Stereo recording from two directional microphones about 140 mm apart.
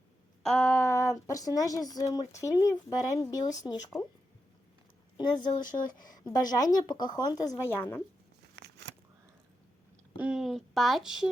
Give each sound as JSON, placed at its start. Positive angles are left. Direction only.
{"t": 0.4, "sound": "a woman's voice", "side_deg": 10}
{"t": 5.1, "sound": "speech", "side_deg": 30}
{"t": 10.2, "sound": "speech", "side_deg": -5}